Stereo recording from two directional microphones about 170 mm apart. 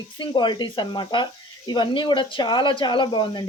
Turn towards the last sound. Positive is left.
turn(degrees=30)  # may be behind; listen again after turning